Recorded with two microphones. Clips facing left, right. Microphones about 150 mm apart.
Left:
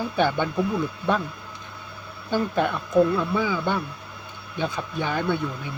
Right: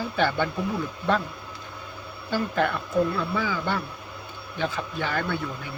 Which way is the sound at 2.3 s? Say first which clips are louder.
Left 2 dB; 15° left (ahead or behind).